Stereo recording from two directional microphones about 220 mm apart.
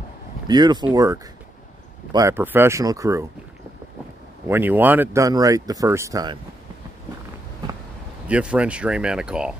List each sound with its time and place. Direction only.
0.5 s speech: 20° right (ahead or behind)
4.5 s speech: 10° right (ahead or behind)
8.3 s speech: 5° right (ahead or behind)